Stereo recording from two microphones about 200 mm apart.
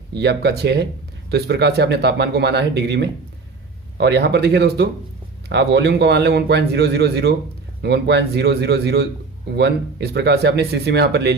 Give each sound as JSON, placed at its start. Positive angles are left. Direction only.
{"t": 0.2, "sound": "a man's voice", "side_deg": -55}